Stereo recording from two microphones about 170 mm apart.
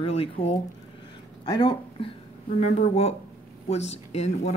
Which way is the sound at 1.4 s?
25° left (ahead or behind).